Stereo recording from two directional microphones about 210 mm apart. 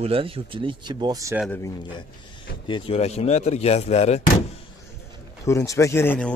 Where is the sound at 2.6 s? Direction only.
25° left (ahead or behind).